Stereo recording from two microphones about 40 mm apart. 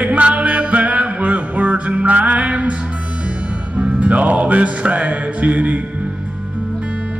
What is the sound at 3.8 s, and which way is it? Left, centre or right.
Music, right.